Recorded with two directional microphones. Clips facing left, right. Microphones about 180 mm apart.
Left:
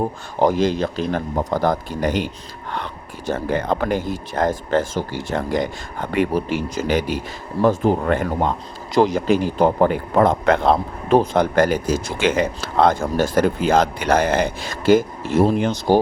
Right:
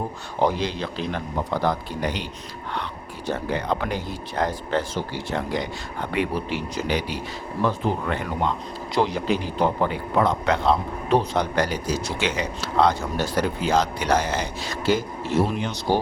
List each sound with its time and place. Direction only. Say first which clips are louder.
0.3 s speech: left 6 dB; 45° left (ahead or behind)